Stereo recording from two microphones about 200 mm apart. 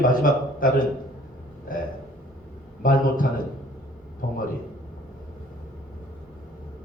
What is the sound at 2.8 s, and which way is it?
Speech, 45° left (ahead or behind).